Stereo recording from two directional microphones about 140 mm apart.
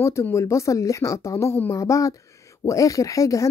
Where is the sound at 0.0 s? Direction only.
20° left (ahead or behind).